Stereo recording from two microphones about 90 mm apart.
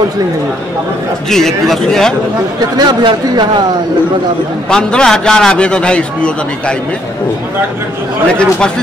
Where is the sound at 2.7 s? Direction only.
55° right (ahead or behind).